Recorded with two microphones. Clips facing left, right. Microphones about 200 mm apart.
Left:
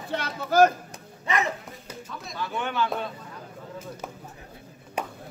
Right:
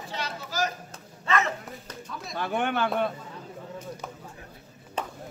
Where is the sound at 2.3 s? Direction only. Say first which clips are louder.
Right 3 dB; 55° right (ahead or behind).